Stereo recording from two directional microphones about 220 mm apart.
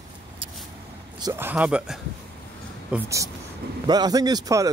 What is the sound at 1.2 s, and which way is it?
Speech, 10° right (ahead or behind).